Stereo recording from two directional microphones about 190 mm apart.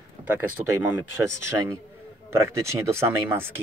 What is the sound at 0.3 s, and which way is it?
Speech, 10° right (ahead or behind).